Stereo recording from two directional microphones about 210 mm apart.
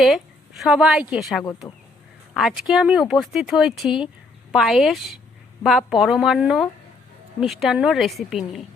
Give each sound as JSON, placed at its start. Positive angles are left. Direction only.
{"t": 0.0, "sound": "a woman's voice", "side_deg": 0}